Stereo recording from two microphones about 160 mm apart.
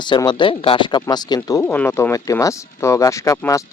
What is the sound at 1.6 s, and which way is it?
Speech, 10° left (ahead or behind).